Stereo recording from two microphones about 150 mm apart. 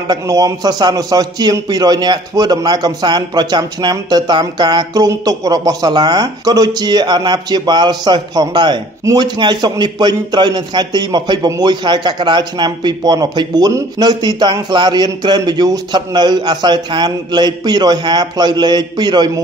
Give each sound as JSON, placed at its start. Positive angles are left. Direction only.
{"t": 0.1, "sound": "a man's voice", "side_deg": -25}